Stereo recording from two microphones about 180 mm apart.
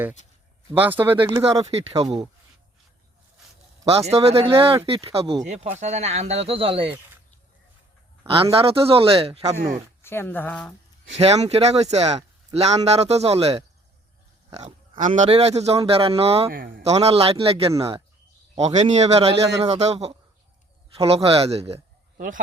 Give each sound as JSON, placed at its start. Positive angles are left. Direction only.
{"t": 0.7, "sound": "speech", "side_deg": -10}
{"t": 1.3, "sound": "speech", "side_deg": -20}
{"t": 3.8, "sound": "a man's voice", "side_deg": -35}
{"t": 8.3, "sound": "a man's voice", "side_deg": -30}
{"t": 10.0, "sound": "speech", "side_deg": 15}
{"t": 11.1, "sound": "a man's voice", "side_deg": -35}
{"t": 16.5, "sound": "speech", "side_deg": -55}
{"t": 16.8, "sound": "a man's voice", "side_deg": -35}